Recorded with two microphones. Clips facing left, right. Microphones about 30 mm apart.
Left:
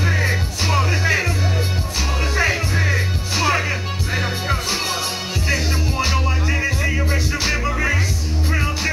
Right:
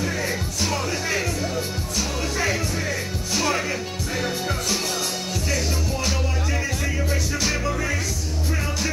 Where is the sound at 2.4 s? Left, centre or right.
Left.